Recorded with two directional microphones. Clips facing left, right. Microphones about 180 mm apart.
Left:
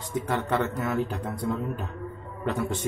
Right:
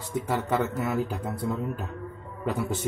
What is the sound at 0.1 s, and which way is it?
Speech, 10° right (ahead or behind).